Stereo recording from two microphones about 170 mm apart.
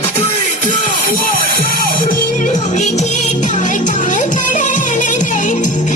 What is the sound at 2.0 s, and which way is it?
Music, 50° left (ahead or behind).